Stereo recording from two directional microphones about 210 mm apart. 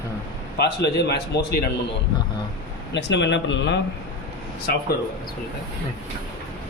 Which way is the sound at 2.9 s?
55° left (ahead or behind).